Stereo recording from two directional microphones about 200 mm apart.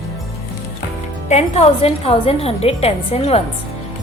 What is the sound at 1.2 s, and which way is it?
A woman's voice, 30° left (ahead or behind).